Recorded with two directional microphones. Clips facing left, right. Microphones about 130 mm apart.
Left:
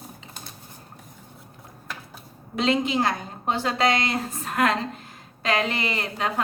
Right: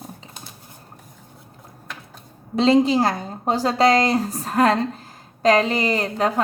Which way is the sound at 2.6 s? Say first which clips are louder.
Right 7 dB; 35° right (ahead or behind).